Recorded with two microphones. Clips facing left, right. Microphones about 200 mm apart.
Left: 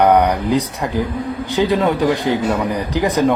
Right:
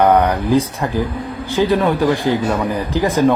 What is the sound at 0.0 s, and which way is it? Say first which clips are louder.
Speech: even; 15° left (ahead or behind).